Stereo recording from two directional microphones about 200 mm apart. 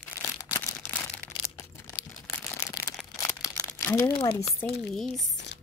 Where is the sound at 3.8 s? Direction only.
15° left (ahead or behind).